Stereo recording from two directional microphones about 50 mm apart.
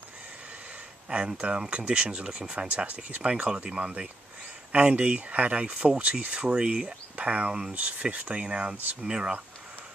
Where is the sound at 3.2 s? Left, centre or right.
Right.